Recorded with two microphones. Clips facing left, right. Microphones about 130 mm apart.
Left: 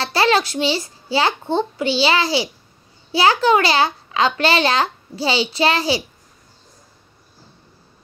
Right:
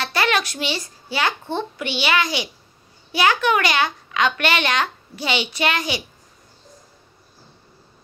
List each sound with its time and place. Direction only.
0.0 s a child's voice: 30° left (ahead or behind)